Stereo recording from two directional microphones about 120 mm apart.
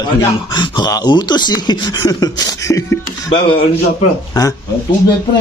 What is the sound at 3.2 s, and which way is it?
Speech, 50° left (ahead or behind).